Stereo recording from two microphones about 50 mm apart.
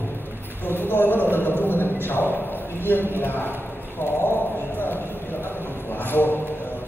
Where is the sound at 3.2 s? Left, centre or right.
Left.